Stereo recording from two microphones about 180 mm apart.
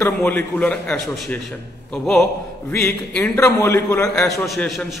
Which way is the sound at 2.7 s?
10° left (ahead or behind).